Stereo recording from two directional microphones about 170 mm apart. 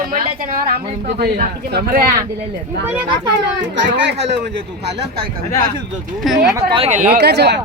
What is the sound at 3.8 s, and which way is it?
Speech, 90° right.